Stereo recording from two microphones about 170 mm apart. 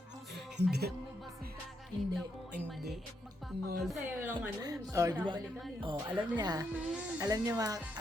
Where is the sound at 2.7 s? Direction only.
Centre (ahead or behind).